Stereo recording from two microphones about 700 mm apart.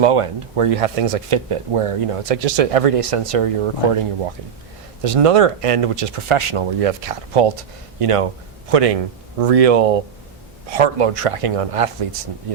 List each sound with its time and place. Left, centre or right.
0.0 s speech: right
5.0 s speech: right